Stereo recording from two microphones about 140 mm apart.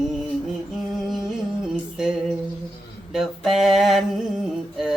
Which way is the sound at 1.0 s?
Centre (ahead or behind).